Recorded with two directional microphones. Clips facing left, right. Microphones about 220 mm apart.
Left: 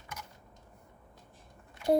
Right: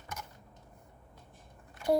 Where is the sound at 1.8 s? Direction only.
45° right (ahead or behind).